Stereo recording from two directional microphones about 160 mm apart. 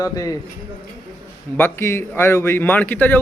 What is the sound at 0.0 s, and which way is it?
Speech, 20° left (ahead or behind).